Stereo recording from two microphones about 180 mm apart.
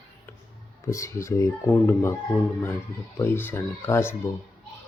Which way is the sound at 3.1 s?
10° left (ahead or behind).